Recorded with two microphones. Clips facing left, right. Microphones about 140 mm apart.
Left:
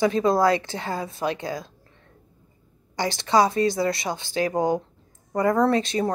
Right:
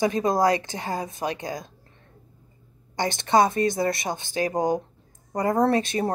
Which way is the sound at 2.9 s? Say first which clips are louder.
Even; 50° right (ahead or behind).